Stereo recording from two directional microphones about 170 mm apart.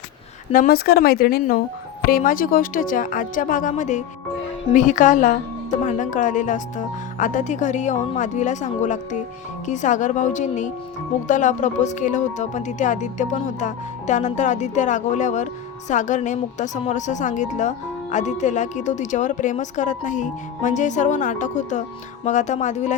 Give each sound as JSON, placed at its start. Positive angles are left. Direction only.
{"t": 0.5, "sound": "a woman's voice", "side_deg": 60}